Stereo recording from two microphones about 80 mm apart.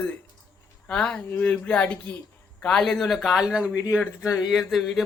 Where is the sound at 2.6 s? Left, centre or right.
Centre.